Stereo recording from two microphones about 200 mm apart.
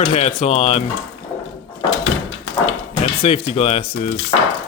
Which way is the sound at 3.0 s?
30° left (ahead or behind).